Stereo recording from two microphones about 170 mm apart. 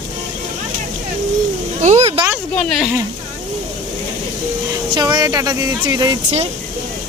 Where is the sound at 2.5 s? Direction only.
5° left (ahead or behind).